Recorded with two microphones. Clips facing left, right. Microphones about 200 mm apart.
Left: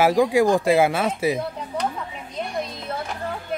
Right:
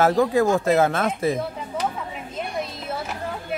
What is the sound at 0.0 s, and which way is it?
A man's voice, 15° left (ahead or behind).